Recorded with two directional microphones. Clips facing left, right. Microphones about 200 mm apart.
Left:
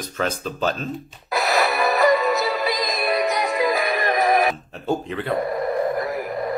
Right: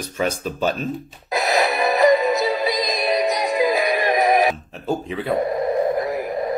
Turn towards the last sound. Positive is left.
turn(degrees=-20)  # may be behind; listen again after turning